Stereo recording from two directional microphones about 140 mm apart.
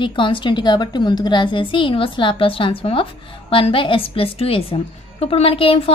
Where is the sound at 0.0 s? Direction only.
35° left (ahead or behind).